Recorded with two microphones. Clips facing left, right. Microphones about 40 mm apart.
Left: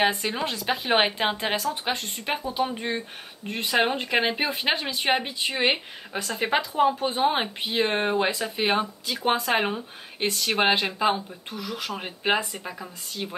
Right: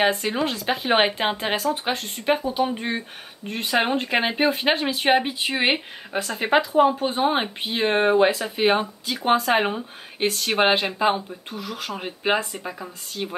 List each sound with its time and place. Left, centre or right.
0.2 s speech: centre
12.8 s speech: centre